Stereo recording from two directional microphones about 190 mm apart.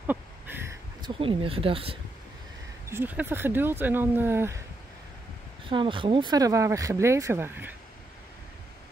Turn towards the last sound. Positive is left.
turn(degrees=-10)  # may be behind; listen again after turning